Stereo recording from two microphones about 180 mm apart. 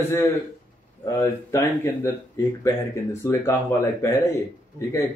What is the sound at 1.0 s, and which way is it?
A man's voice, 15° left (ahead or behind).